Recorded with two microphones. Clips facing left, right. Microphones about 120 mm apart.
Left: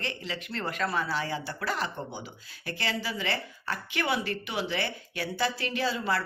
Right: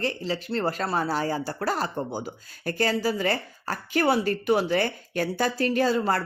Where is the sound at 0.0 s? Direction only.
35° right (ahead or behind).